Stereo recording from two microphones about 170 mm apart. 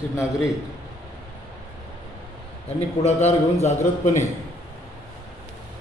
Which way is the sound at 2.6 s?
40° left (ahead or behind).